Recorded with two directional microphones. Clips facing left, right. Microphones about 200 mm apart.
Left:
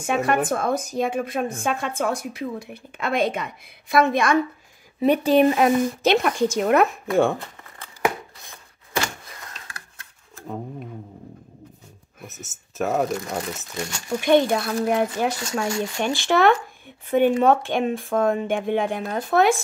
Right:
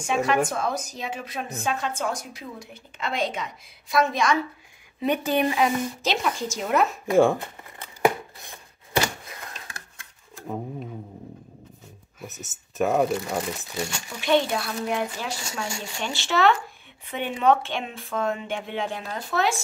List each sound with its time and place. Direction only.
0.0 s a woman's voice: 55° left (ahead or behind)
5.0 s speech: 30° left (ahead or behind)
5.5 s a woman's voice: 55° left (ahead or behind)
7.1 s speech: centre (ahead or behind)
10.3 s a sound: 5° right (ahead or behind)
12.2 s speech: centre (ahead or behind); by 13.8 s 15° right (ahead or behind)
14.0 s speech: 50° left (ahead or behind)